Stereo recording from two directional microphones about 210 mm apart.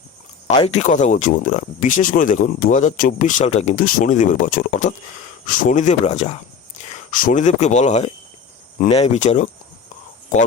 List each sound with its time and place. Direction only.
0.6 s speech: 30° left (ahead or behind)